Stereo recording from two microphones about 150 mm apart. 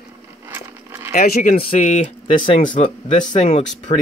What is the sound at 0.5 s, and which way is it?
Keys jangling, 15° right (ahead or behind).